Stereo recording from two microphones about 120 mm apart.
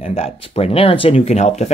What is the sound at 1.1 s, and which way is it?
Speech, 60° left (ahead or behind).